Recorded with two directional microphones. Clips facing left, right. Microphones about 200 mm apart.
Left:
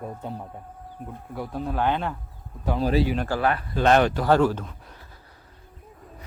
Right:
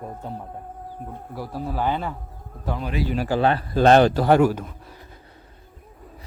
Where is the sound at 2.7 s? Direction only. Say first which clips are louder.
Left 8 dB; 35° left (ahead or behind).